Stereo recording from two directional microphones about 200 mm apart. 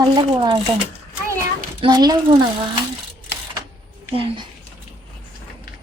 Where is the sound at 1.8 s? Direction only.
20° right (ahead or behind).